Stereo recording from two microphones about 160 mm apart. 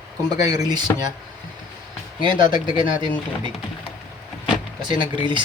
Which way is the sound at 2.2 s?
30° right (ahead or behind).